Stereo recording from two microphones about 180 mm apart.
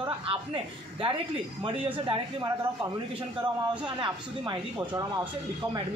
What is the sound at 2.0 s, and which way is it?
Speech, 20° right (ahead or behind).